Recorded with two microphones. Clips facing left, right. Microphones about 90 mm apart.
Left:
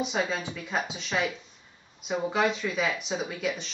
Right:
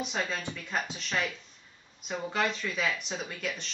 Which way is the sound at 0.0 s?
5° left (ahead or behind).